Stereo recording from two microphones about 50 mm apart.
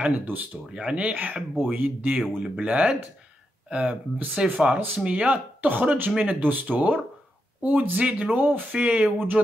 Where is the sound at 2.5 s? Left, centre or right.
Right.